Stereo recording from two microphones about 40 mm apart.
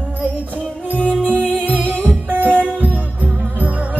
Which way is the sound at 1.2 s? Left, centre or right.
Left.